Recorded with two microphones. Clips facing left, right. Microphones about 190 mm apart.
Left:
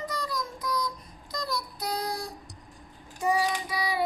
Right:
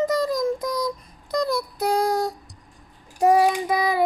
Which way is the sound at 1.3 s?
55° right (ahead or behind).